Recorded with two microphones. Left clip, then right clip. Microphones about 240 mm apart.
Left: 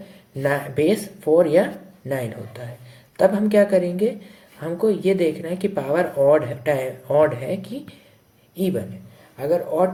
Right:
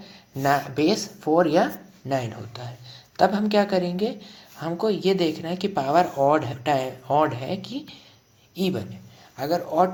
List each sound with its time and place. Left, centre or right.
0.4 s speech: right